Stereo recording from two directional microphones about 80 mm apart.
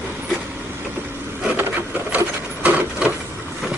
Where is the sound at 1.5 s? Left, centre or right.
Right.